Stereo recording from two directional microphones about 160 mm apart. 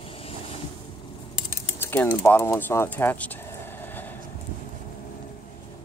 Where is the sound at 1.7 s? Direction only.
15° left (ahead or behind).